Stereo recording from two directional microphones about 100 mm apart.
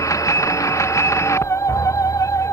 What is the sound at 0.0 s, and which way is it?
Music, 30° left (ahead or behind).